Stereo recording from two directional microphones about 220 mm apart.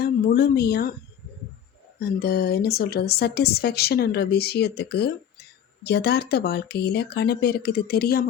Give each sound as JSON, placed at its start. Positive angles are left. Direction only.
{"t": 0.0, "sound": "speech", "side_deg": 45}
{"t": 2.0, "sound": "a woman's voice", "side_deg": 45}